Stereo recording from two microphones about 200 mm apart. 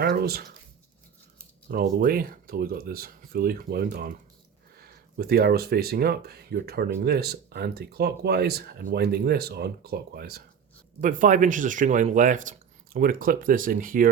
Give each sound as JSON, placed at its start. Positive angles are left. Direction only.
{"t": 0.0, "sound": "speech", "side_deg": -50}
{"t": 1.6, "sound": "speech", "side_deg": -50}
{"t": 11.0, "sound": "speech", "side_deg": -40}